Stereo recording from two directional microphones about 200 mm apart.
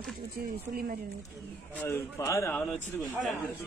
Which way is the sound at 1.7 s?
10° left (ahead or behind).